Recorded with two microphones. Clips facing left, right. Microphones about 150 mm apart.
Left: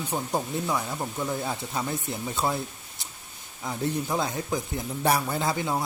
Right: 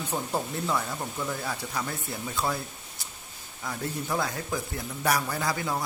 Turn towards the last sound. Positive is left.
turn(degrees=20)  # may be behind; listen again after turning